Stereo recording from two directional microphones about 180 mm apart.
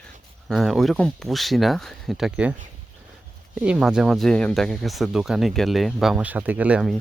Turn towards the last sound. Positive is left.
turn(degrees=-5)  # may be behind; listen again after turning